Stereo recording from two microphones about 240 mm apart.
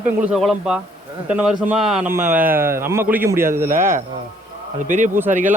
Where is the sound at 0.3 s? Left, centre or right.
Centre.